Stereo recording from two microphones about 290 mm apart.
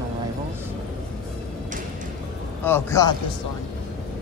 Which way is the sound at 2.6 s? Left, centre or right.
Centre.